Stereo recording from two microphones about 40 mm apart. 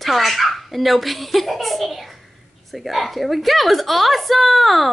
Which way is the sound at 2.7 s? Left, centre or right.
Centre.